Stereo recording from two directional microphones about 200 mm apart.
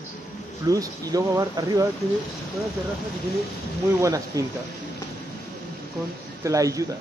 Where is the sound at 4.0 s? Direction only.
15° right (ahead or behind).